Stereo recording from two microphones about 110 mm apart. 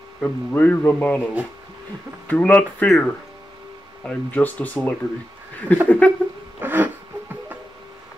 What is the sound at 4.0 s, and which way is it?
Speech, 10° left (ahead or behind).